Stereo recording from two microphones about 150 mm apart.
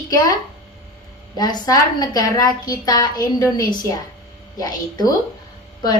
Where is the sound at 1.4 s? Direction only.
25° left (ahead or behind).